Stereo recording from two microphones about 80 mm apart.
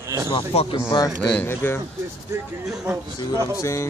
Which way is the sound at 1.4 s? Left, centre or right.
Left.